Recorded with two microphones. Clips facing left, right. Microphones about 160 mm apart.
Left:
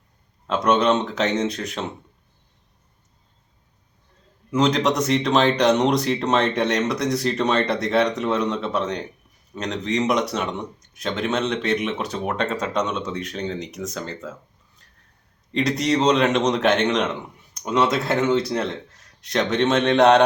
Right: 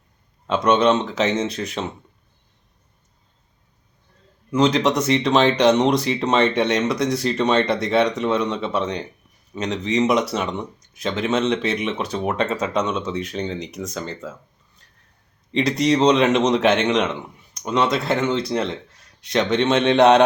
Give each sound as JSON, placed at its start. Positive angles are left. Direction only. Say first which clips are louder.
{"t": 0.4, "sound": "speech", "louder": "right 2 dB", "side_deg": 0}
{"t": 4.5, "sound": "speech", "louder": "right 2 dB", "side_deg": 0}
{"t": 14.8, "sound": "a sound", "louder": "right 1 dB", "side_deg": 0}
{"t": 15.5, "sound": "speech", "louder": "right 2 dB", "side_deg": 0}